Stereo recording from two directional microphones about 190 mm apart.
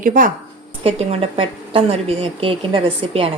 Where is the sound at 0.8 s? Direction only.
30° right (ahead or behind).